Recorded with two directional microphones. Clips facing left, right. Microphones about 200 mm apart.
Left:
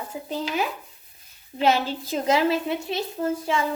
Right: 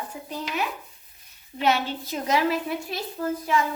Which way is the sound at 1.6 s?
30° left (ahead or behind).